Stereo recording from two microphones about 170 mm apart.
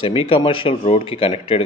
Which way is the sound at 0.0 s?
35° left (ahead or behind).